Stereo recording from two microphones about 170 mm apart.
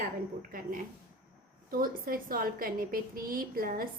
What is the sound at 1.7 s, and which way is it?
A woman's voice, 55° right (ahead or behind).